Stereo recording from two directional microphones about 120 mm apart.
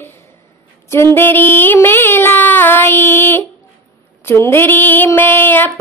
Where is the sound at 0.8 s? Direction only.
20° left (ahead or behind).